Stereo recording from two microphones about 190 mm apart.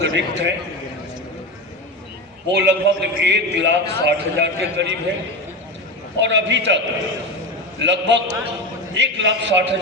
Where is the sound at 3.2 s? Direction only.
65° right (ahead or behind).